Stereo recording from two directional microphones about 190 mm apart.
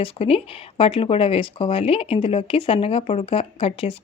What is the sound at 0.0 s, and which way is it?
Speech, 30° left (ahead or behind).